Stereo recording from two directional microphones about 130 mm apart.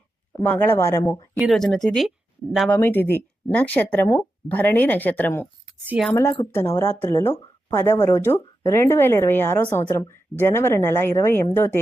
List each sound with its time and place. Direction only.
0.4 s speech: 15° left (ahead or behind)
1.4 s speech: centre (ahead or behind)
2.6 s speech: 15° left (ahead or behind)